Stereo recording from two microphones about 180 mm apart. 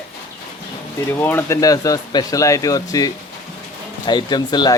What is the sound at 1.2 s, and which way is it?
Speech, 10° left (ahead or behind).